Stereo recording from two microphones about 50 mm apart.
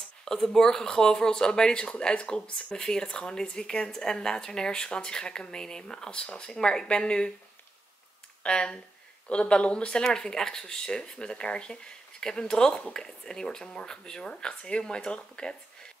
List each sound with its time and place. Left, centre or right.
0.2 s speech: centre
8.5 s speech: centre